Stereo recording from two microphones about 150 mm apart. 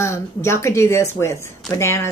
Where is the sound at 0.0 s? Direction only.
20° left (ahead or behind).